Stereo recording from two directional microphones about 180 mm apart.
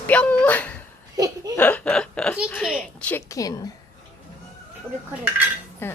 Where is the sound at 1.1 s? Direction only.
20° right (ahead or behind).